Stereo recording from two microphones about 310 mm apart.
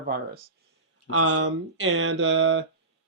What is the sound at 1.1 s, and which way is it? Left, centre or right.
Speech, right.